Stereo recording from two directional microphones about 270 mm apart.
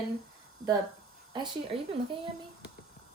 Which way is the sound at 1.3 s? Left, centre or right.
Centre.